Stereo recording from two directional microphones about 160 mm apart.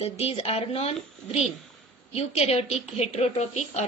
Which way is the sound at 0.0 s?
40° left (ahead or behind).